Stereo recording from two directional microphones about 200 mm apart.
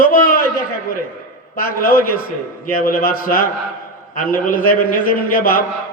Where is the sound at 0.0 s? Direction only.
45° left (ahead or behind).